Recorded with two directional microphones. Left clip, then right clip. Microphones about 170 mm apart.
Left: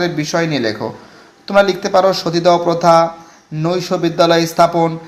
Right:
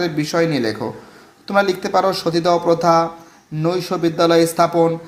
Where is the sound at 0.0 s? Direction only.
Centre (ahead or behind).